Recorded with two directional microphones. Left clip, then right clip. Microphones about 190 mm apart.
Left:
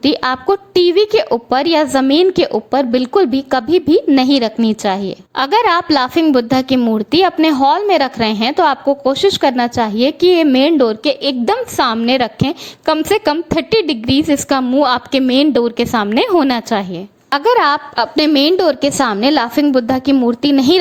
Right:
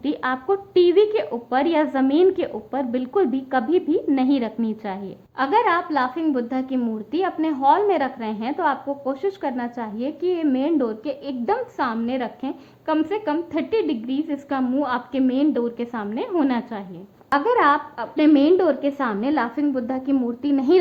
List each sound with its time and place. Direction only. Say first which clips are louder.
0.0 s a woman's voice: left 10 dB; 45° left (ahead or behind)